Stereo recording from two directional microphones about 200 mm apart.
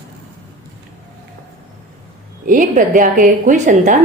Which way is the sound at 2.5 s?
40° right (ahead or behind).